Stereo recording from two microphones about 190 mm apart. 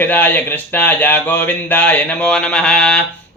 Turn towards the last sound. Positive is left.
turn(degrees=5)  # may be behind; listen again after turning